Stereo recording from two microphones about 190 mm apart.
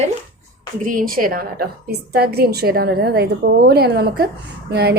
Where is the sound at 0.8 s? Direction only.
45° right (ahead or behind).